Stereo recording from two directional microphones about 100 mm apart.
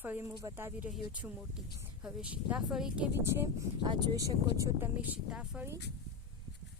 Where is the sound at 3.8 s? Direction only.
45° right (ahead or behind).